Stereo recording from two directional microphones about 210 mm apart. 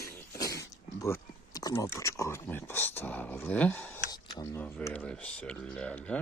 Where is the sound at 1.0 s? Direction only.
15° left (ahead or behind).